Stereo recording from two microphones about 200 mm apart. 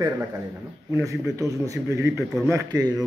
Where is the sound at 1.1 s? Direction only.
15° right (ahead or behind).